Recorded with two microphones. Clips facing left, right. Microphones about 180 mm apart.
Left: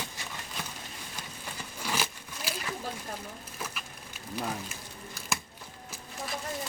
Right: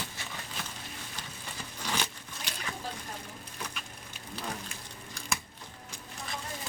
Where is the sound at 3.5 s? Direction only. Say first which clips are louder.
Left 1 dB; 5° left (ahead or behind).